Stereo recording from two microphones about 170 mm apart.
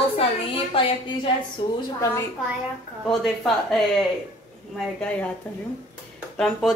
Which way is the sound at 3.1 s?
Centre (ahead or behind).